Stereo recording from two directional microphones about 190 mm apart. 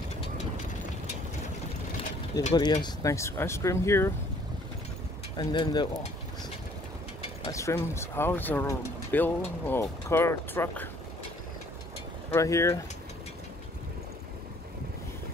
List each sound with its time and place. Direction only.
2.5 s speech: 20° left (ahead or behind)
5.4 s speech: 25° left (ahead or behind)
7.4 s speech: 15° left (ahead or behind)
12.3 s speech: 15° left (ahead or behind)